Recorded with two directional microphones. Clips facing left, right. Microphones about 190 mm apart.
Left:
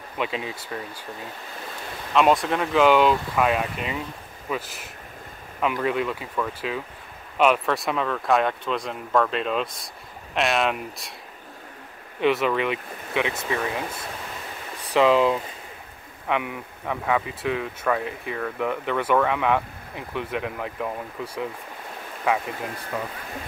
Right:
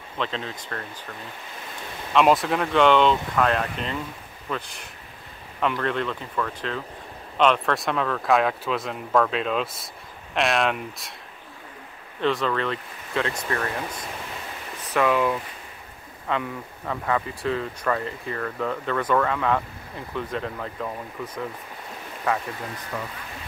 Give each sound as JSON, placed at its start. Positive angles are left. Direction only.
{"t": 0.2, "sound": "speech", "side_deg": 10}
{"t": 2.1, "sound": "speech", "side_deg": 0}
{"t": 12.2, "sound": "speech", "side_deg": 10}
{"t": 14.9, "sound": "speech", "side_deg": 20}